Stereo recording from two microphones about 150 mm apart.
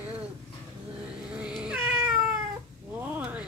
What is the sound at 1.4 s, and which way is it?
Cat, 5° right (ahead or behind).